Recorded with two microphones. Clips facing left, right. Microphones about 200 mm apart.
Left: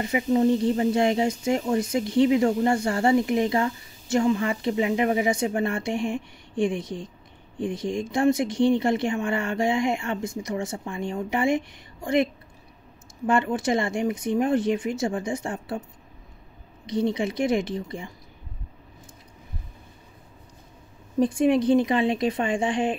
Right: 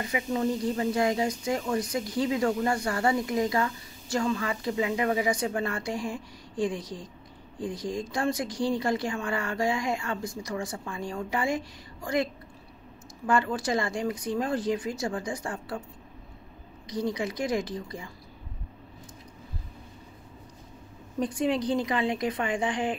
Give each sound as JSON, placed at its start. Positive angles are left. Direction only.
{"t": 0.0, "sound": "speech", "side_deg": 25}
{"t": 13.3, "sound": "speech", "side_deg": 25}
{"t": 16.8, "sound": "speech", "side_deg": 25}
{"t": 21.2, "sound": "speech", "side_deg": 25}